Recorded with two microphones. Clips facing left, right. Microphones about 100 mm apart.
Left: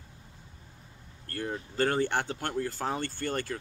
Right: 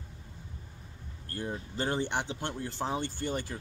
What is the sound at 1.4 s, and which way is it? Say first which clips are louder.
Speech: left 5 dB; 55° left (ahead or behind).